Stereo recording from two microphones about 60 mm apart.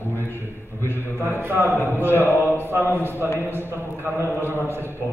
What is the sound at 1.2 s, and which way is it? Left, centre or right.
Speech, right.